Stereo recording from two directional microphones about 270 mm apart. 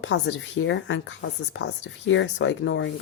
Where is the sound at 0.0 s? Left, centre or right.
Left.